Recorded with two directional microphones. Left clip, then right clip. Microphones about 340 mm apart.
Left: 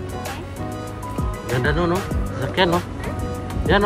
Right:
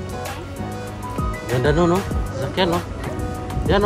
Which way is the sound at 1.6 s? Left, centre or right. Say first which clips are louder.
Right 4 dB; centre.